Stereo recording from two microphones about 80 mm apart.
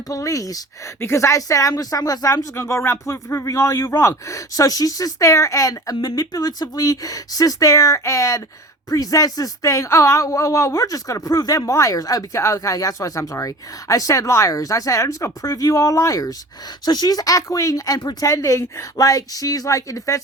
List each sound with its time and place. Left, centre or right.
0.1 s speech: left
1.0 s speech: left
16.8 s speech: left